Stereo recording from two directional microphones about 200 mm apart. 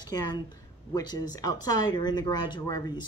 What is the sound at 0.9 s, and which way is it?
A woman's voice, 20° left (ahead or behind).